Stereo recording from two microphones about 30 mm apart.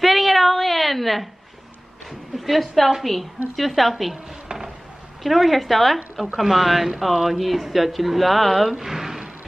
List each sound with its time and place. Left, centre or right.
0.0 s a sound: centre
2.0 s speech: centre
5.2 s speech: centre
6.4 s speech: centre
8.7 s speech: centre